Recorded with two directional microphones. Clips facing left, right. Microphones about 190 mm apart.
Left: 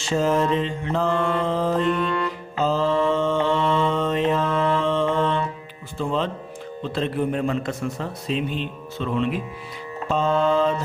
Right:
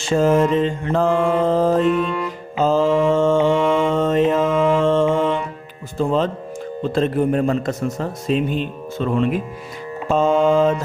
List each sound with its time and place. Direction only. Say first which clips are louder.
0.1 s a man's voice: right 5 dB; 50° right (ahead or behind)
1.8 s music: right 4 dB; 5° right (ahead or behind)
2.6 s mantra: right 5 dB; 45° right (ahead or behind)
6.0 s a man's voice: right 6 dB; 45° right (ahead or behind)